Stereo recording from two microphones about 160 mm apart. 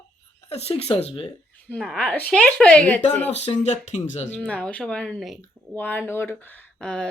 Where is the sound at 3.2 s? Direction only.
40° left (ahead or behind).